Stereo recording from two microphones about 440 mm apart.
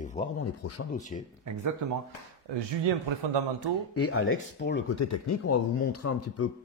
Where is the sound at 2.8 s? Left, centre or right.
Right.